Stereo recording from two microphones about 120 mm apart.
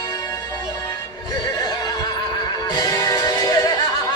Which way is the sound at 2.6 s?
35° left (ahead or behind).